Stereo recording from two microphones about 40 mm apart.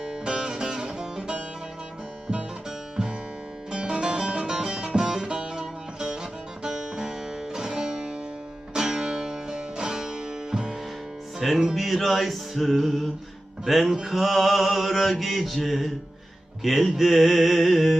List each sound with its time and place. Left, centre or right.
0.0 s music: right
2.6 s music: centre
11.3 s mantra: centre